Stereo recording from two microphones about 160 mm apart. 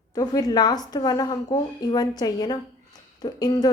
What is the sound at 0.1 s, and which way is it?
A woman's voice, 25° left (ahead or behind).